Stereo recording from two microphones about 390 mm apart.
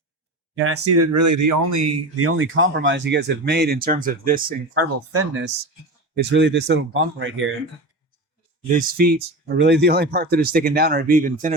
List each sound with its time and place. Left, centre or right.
0.5 s speech: right
4.7 s speech: right
8.7 s speech: right